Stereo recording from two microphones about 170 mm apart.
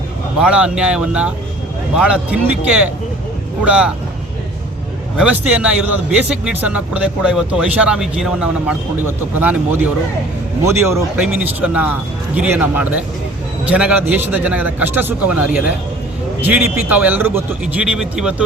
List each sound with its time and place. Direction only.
0.3 s a man's voice: 5° right (ahead or behind)
5.1 s a man's voice: 5° right (ahead or behind)